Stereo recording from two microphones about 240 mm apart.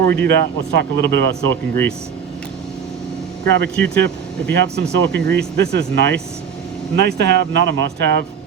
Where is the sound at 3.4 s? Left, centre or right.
Right.